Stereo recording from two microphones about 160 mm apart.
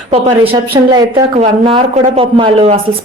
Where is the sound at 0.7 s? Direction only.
25° right (ahead or behind).